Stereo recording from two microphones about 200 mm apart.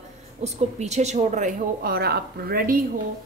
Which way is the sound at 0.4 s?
35° right (ahead or behind).